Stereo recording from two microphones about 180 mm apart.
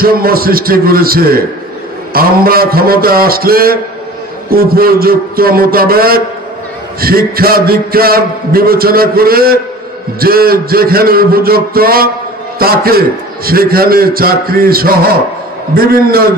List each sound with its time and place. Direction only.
0.0 s a man's voice: 55° right (ahead or behind)